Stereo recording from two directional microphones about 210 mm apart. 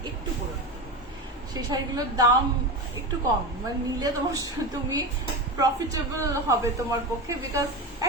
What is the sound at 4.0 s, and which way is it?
Speech, 15° right (ahead or behind).